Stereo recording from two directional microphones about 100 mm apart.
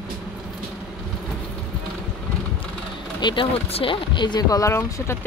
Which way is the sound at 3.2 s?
55° left (ahead or behind).